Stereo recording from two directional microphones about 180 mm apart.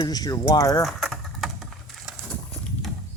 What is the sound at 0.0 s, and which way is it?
Speech, 20° left (ahead or behind).